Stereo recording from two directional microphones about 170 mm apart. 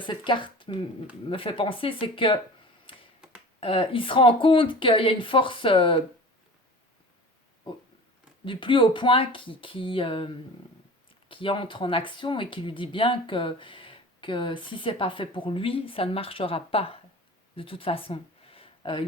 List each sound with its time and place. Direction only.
0.0 s speech: 30° left (ahead or behind)
2.9 s finger snapping: 30° left (ahead or behind)
3.6 s speech: 30° left (ahead or behind)
8.4 s speech: 30° left (ahead or behind)